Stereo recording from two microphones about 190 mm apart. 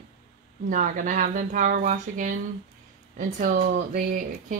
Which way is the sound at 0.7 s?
45° right (ahead or behind).